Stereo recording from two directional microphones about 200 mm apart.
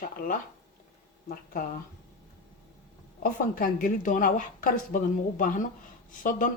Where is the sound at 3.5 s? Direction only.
45° left (ahead or behind).